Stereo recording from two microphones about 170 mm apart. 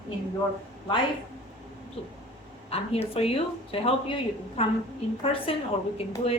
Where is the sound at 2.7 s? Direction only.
35° left (ahead or behind).